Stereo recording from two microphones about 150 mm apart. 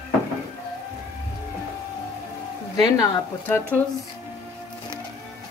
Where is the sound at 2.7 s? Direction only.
25° left (ahead or behind).